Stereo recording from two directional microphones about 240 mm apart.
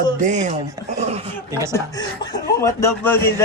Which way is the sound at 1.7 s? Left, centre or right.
Centre.